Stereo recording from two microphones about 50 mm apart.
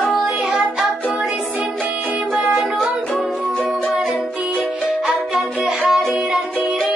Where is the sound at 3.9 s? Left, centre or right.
Centre.